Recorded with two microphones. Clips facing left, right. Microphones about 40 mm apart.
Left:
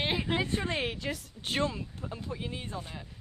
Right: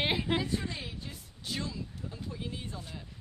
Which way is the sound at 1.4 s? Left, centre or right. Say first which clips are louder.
Left 6 dB; left.